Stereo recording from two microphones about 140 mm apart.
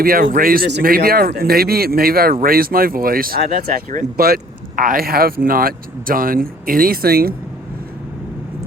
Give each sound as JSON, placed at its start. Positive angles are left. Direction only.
{"t": 0.0, "sound": "speech", "side_deg": -90}